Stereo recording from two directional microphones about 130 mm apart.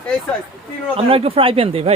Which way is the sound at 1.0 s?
45° right (ahead or behind).